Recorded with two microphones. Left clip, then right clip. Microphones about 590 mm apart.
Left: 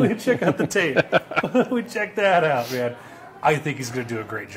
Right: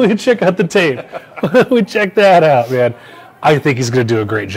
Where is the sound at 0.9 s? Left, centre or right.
Left.